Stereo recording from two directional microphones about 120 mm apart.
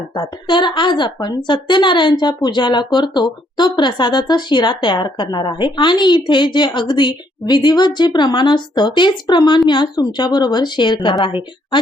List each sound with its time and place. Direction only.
0.2 s a woman's voice: 40° left (ahead or behind)